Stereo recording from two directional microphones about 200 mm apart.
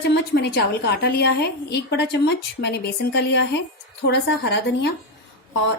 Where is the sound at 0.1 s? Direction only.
55° left (ahead or behind).